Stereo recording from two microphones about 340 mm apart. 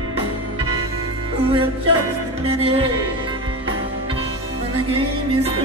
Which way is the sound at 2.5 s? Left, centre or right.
Centre.